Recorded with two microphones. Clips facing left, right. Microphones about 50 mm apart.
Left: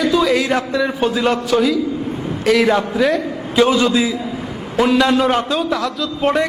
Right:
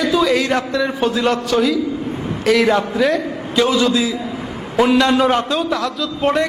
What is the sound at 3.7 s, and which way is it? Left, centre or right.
Speech, left.